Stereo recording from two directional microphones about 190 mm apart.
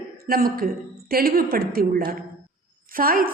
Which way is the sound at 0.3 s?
50° right (ahead or behind).